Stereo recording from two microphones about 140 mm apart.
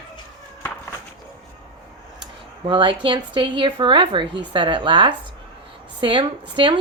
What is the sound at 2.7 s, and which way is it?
Speech, 35° right (ahead or behind).